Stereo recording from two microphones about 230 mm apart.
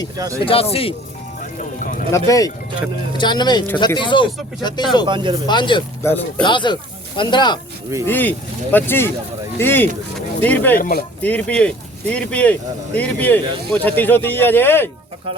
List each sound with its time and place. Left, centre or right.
0.2 s speech: centre
0.4 s speech: left
1.5 s music: left
2.1 s speech: centre
5.0 s speech: centre
5.5 s speech: centre
6.4 s speech: centre
8.0 s speech: centre
10.8 s speech: left
11.2 s speech: centre